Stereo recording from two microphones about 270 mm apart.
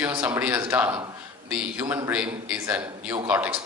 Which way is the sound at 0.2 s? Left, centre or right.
Centre.